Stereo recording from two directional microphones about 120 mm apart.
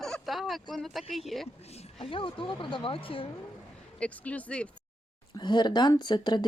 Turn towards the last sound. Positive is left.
turn(degrees=40)  # may be behind; listen again after turning